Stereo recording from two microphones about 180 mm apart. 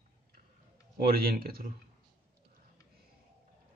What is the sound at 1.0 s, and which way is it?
Speech, 55° right (ahead or behind).